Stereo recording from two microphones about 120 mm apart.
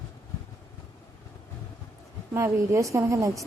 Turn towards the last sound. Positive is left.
turn(degrees=-25)  # may be behind; listen again after turning